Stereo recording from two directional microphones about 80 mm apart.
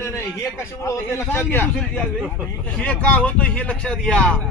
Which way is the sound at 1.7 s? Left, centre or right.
Centre.